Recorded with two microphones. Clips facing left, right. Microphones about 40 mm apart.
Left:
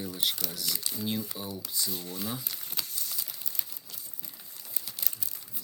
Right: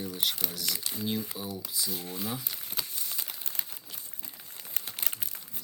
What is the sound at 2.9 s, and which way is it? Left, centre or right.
Crumpling, right.